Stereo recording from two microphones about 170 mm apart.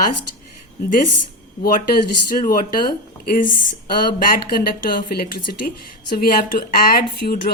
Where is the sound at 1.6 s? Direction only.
55° left (ahead or behind).